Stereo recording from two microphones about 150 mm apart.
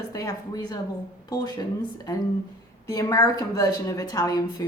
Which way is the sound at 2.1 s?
25° left (ahead or behind).